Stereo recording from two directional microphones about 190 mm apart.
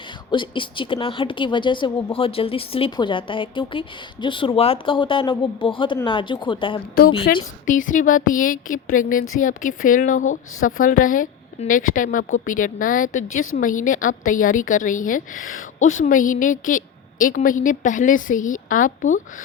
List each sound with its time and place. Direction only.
0.3 s speech: 25° left (ahead or behind)
7.3 s a woman's voice: 50° left (ahead or behind)